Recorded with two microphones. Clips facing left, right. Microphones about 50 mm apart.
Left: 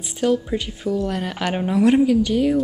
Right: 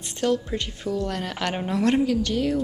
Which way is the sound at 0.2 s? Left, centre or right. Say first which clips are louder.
Left 4 dB; centre.